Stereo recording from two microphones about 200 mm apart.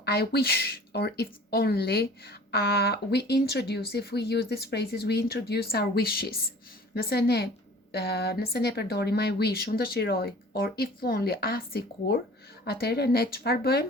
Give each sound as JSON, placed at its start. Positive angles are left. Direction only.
{"t": 0.0, "sound": "speech", "side_deg": 50}